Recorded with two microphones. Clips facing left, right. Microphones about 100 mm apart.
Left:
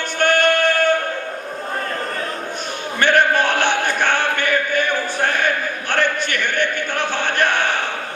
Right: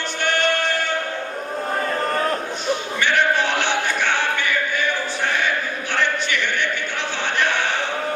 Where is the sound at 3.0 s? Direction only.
50° left (ahead or behind).